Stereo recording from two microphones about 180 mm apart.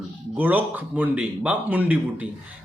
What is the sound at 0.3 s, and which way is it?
A man's voice, 10° right (ahead or behind).